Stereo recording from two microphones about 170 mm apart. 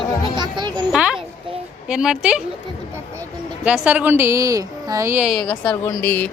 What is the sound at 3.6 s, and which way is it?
A woman's voice, 5° right (ahead or behind).